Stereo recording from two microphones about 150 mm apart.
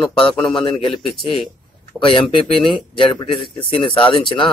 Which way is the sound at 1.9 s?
35° left (ahead or behind).